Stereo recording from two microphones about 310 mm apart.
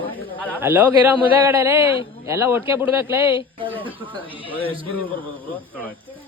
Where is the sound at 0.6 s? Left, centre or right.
Centre.